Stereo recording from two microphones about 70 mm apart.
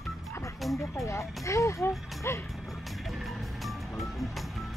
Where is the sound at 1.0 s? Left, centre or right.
Left.